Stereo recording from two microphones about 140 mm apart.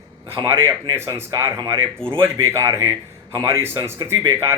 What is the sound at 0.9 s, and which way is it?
A man's voice, 20° right (ahead or behind).